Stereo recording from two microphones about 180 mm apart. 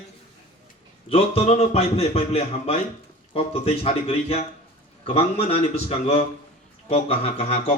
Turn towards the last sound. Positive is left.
turn(degrees=35)  # may be behind; listen again after turning